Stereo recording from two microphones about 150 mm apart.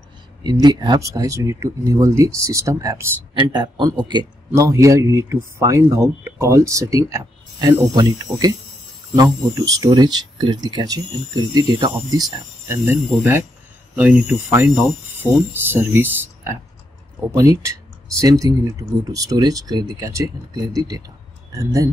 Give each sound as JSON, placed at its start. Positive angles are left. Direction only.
{"t": 0.4, "sound": "a man's voice", "side_deg": -30}